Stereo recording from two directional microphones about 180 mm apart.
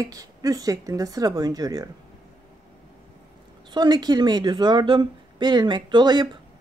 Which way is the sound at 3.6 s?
25° right (ahead or behind).